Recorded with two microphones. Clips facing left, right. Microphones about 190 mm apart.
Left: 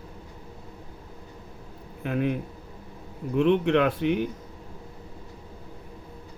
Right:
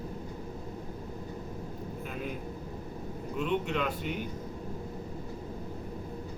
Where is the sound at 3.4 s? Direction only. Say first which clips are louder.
Left 10 dB; 70° left (ahead or behind).